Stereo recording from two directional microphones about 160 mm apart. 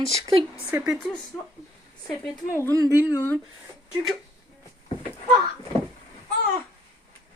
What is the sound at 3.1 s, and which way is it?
Speech, 15° left (ahead or behind).